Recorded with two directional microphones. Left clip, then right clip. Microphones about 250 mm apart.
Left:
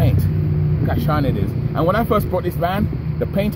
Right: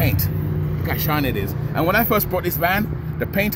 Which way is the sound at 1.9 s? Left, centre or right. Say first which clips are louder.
Even; right.